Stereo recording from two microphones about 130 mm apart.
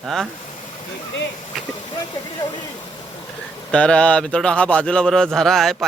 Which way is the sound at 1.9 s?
35° left (ahead or behind).